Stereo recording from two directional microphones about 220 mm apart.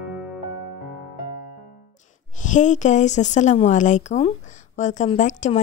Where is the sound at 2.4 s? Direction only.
35° left (ahead or behind).